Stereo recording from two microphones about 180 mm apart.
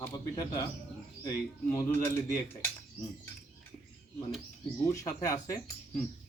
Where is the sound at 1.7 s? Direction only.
15° left (ahead or behind).